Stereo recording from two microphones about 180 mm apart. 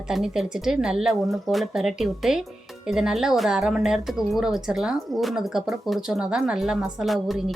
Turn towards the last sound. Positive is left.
turn(degrees=0)  # may be behind; listen again after turning